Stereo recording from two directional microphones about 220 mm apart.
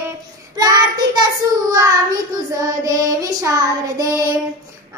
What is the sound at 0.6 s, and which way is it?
Child singing, 15° right (ahead or behind).